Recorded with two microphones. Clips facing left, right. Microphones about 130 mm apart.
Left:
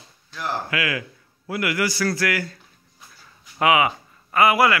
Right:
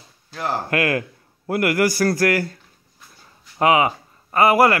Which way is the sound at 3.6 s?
35° right (ahead or behind).